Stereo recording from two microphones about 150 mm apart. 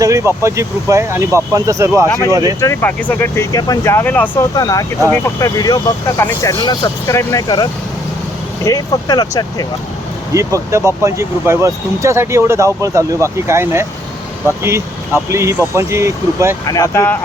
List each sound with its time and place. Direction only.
0.0 s speech: 20° right (ahead or behind)
2.6 s speech: 15° left (ahead or behind)
4.5 s speech: 25° left (ahead or behind)
10.3 s speech: 20° right (ahead or behind)
16.6 s speech: 20° left (ahead or behind)